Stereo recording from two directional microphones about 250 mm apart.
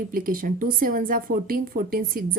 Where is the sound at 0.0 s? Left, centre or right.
Right.